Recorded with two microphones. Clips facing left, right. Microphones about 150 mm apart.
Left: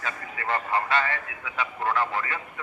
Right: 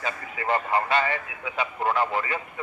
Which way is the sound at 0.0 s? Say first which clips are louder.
Right 3 dB; 20° right (ahead or behind).